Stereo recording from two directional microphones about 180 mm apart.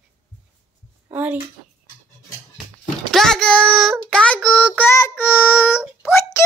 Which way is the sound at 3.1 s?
Centre (ahead or behind).